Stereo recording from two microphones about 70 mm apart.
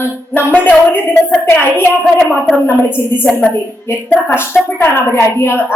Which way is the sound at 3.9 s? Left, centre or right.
Left.